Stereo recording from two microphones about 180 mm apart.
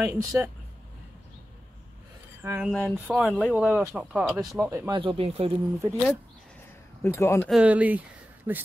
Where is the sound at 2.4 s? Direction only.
10° right (ahead or behind).